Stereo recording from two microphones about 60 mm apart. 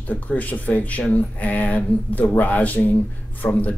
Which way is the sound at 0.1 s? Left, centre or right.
Left.